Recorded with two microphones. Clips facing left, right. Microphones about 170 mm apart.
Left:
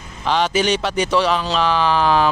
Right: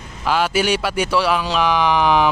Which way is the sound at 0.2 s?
5° right (ahead or behind).